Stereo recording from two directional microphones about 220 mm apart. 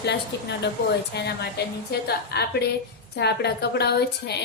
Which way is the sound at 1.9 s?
45° left (ahead or behind).